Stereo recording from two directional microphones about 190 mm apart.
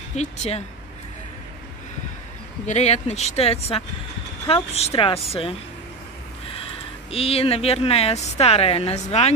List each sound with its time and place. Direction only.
0.1 s speech: 35° left (ahead or behind)
2.6 s speech: 35° left (ahead or behind)
7.1 s speech: 30° left (ahead or behind)